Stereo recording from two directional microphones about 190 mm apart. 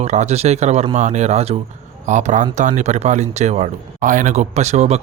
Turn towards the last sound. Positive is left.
turn(degrees=-35)  # may be behind; listen again after turning